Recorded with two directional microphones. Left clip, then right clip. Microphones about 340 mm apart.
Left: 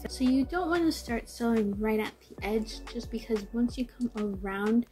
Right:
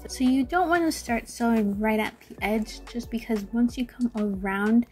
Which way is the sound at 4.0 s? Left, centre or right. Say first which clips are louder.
Right 6 dB; centre.